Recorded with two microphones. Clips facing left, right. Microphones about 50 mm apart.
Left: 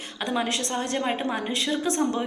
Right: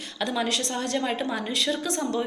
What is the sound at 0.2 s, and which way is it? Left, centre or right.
A woman's voice, left.